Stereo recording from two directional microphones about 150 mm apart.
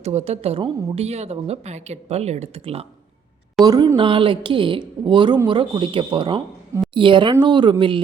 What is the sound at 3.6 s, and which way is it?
Speech, 25° right (ahead or behind).